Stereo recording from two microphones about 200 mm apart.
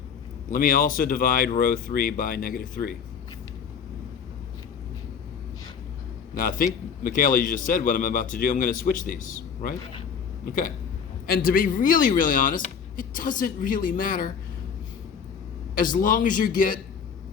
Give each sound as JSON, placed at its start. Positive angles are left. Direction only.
{"t": 0.5, "sound": "speech", "side_deg": 45}
{"t": 6.3, "sound": "speech", "side_deg": 45}
{"t": 11.3, "sound": "speech", "side_deg": 45}
{"t": 15.7, "sound": "speech", "side_deg": 45}